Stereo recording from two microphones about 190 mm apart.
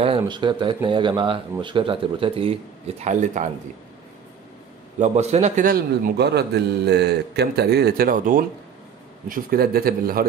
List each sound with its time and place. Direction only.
0.0 s speech: 25° right (ahead or behind)
3.0 s speech: 40° right (ahead or behind)
4.9 s a man's voice: 35° right (ahead or behind)